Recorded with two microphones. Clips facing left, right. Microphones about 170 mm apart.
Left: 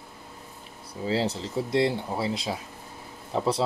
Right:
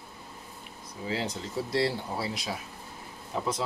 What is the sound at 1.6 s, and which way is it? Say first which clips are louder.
Speech: left 4 dB; 20° left (ahead or behind).